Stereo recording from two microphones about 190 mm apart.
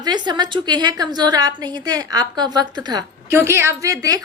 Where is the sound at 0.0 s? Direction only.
20° right (ahead or behind).